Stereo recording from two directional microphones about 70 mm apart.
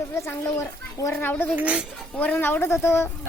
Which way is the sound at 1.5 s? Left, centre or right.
Centre.